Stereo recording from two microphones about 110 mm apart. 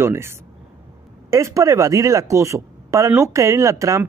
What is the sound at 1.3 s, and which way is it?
Speech, 30° right (ahead or behind).